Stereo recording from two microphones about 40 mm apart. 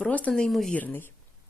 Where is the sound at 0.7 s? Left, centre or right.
Left.